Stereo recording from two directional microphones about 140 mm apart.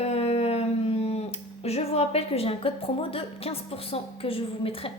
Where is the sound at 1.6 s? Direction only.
45° left (ahead or behind).